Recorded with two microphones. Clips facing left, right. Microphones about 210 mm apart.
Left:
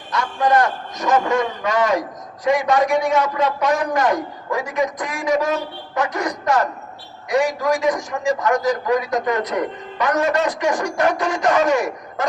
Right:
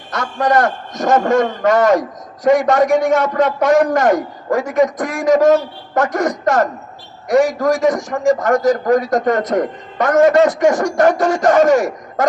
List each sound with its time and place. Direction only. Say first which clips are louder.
0.1 s a man's voice: right 2 dB; 45° right (ahead or behind)